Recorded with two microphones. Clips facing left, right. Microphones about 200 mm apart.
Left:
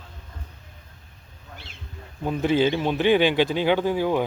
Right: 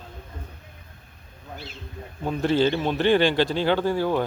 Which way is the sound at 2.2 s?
10° left (ahead or behind).